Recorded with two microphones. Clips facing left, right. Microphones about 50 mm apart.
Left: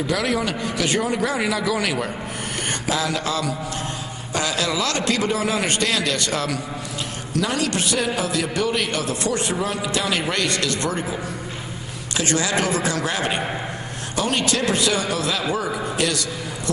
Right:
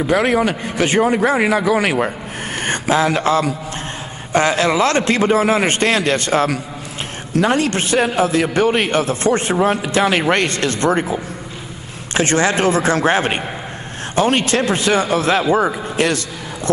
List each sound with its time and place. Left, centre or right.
0.0 s a man's voice: right
2.6 s a sound: right
4.3 s a man's voice: right